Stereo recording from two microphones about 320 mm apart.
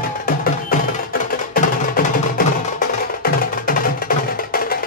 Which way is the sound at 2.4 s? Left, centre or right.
Left.